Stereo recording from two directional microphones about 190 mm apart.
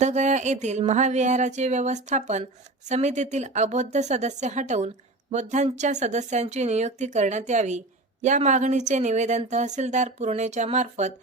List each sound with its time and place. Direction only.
0.0 s speech: 40° right (ahead or behind)